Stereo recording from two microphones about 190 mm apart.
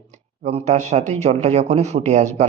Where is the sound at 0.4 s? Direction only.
35° right (ahead or behind).